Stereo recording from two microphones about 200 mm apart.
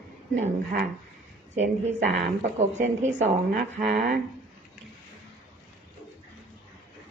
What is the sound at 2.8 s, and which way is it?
Speech, 35° right (ahead or behind).